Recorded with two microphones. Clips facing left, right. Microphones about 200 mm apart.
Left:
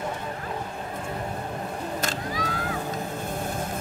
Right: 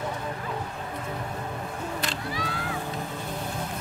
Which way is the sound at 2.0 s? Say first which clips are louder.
Left 2 dB; 45° left (ahead or behind).